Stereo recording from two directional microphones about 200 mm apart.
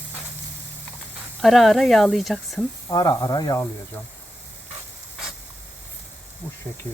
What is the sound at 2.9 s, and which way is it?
Speech, 20° left (ahead or behind).